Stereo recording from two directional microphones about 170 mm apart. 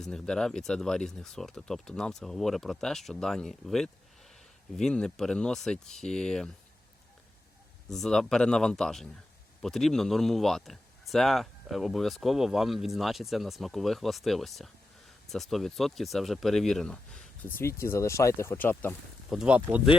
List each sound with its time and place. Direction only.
0.0 s speech: 5° left (ahead or behind)
7.9 s speech: centre (ahead or behind)
17.6 s speech: 15° left (ahead or behind)
19.3 s speech: 5° right (ahead or behind)